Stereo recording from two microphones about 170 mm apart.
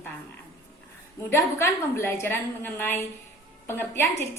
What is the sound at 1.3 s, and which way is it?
A woman's voice, 15° left (ahead or behind).